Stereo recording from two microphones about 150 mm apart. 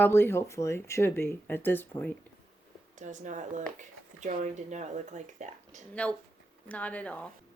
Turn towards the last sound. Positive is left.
turn(degrees=10)  # may be behind; listen again after turning